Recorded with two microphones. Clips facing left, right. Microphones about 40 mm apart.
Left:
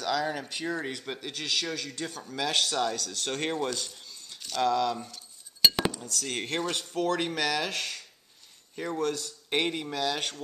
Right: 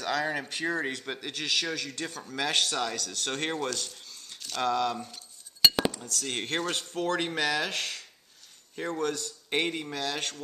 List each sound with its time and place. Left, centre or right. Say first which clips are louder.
0.0 s a man's voice: even; centre
0.9 s a man's voice: right 1 dB; centre
2.3 s a man's voice: even; centre
2.6 s speech: left 2 dB; centre
3.5 s speech: left 1 dB; centre
4.6 s speech: left 2 dB; centre
5.6 s a man's voice: even; centre
9.5 s speech: left 1 dB; centre